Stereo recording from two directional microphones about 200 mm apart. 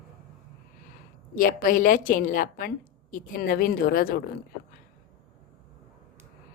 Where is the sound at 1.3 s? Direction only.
45° left (ahead or behind).